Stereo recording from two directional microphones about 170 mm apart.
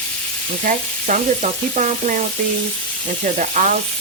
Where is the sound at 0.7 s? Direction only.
50° right (ahead or behind).